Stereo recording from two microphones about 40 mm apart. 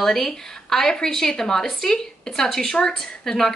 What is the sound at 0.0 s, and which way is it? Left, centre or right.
A woman's voice, centre.